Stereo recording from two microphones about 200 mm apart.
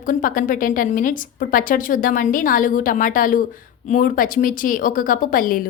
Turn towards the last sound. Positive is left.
turn(degrees=45)  # may be behind; listen again after turning